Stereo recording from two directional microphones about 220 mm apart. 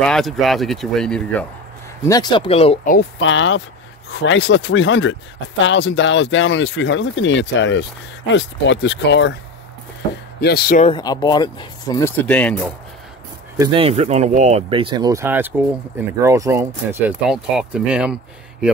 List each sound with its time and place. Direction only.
0.0 s speech: centre (ahead or behind)
2.0 s speech: 20° left (ahead or behind)
2.9 s speech: 50° left (ahead or behind)
10.4 s speech: 45° left (ahead or behind)
10.8 s speech: 20° left (ahead or behind)
12.3 s speech: 5° left (ahead or behind)
13.6 s speech: 25° right (ahead or behind)
17.3 s speech: centre (ahead or behind)